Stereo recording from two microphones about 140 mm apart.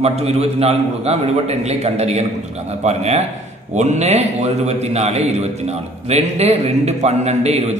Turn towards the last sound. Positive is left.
turn(degrees=-50)  # may be behind; listen again after turning